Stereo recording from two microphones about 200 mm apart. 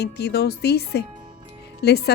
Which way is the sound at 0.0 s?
55° left (ahead or behind).